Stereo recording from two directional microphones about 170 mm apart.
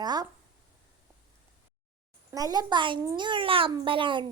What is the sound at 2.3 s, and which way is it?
A child's voice, 20° right (ahead or behind).